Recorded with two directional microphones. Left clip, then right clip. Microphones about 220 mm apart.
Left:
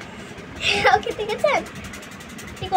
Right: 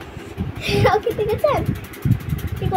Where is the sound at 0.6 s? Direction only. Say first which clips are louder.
Even; 10° right (ahead or behind).